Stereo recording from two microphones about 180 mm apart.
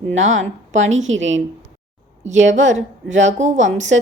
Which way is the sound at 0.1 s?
40° right (ahead or behind).